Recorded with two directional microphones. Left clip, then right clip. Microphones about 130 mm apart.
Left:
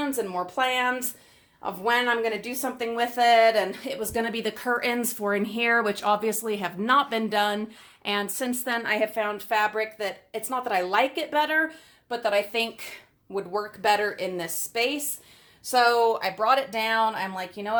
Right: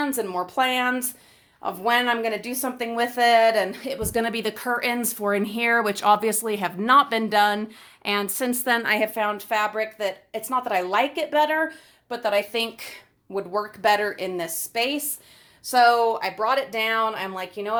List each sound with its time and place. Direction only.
0.0 s speech: 30° right (ahead or behind)
4.1 s speech: 35° right (ahead or behind); by 17.7 s 15° right (ahead or behind)